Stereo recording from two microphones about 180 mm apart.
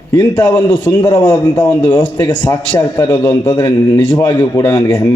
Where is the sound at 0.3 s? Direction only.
15° left (ahead or behind).